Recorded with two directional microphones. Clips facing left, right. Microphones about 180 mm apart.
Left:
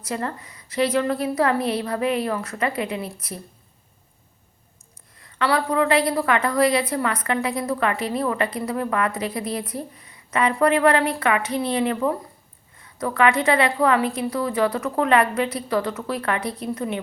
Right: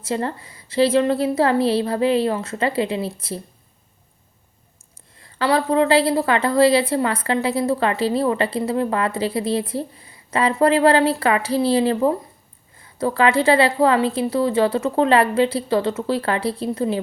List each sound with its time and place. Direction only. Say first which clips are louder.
0.0 s a woman's voice: right 4 dB; 25° right (ahead or behind)
5.1 s a woman's voice: right 3 dB; 30° right (ahead or behind)